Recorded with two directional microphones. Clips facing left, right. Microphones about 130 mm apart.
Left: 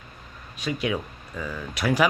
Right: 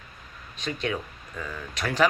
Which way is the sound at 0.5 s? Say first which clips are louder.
Left 3 dB; 10° left (ahead or behind).